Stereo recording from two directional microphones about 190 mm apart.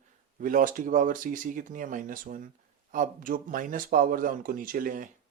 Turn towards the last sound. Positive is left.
turn(degrees=-45)  # may be behind; listen again after turning